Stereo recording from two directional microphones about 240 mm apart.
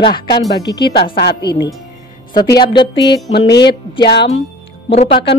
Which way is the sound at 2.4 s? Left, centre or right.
Centre.